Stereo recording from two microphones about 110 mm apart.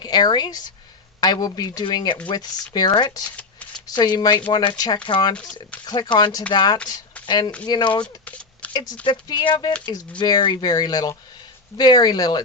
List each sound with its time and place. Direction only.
0.0 s speech: 40° left (ahead or behind)
3.2 s shuffling cards: 15° left (ahead or behind)
3.8 s speech: 40° left (ahead or behind)
8.0 s a sound: 10° left (ahead or behind)
8.7 s speech: 35° left (ahead or behind)